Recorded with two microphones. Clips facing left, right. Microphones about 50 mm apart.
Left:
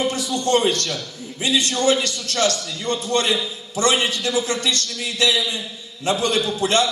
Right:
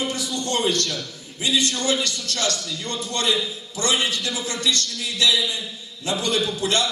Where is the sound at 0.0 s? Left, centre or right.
Left.